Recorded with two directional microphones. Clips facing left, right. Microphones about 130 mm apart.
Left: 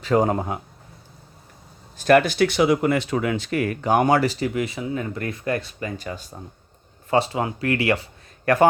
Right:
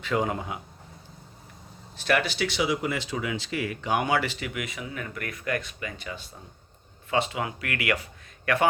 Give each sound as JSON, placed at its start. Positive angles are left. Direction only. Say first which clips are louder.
{"t": 0.0, "sound": "speech", "louder": "left 7 dB", "side_deg": 40}
{"t": 2.0, "sound": "speech", "louder": "left 9 dB", "side_deg": 45}
{"t": 8.4, "sound": "speech", "louder": "left 6 dB", "side_deg": 40}